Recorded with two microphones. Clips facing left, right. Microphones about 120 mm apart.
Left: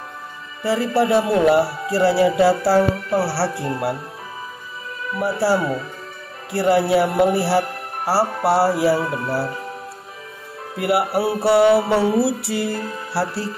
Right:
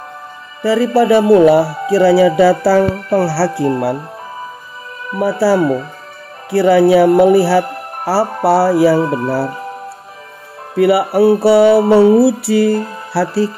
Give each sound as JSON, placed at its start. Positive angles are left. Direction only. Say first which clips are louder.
{"t": 0.7, "sound": "speech", "louder": "right 7 dB", "side_deg": -75}
{"t": 3.1, "sound": "music", "louder": "right 6 dB", "side_deg": -55}
{"t": 5.2, "sound": "music", "louder": "right 6 dB", "side_deg": -65}
{"t": 6.5, "sound": "speech", "louder": "right 7 dB", "side_deg": -70}
{"t": 7.2, "sound": "music", "louder": "right 7 dB", "side_deg": -60}
{"t": 11.1, "sound": "music", "louder": "right 8 dB", "side_deg": -50}
{"t": 13.1, "sound": "speech", "louder": "right 9 dB", "side_deg": -65}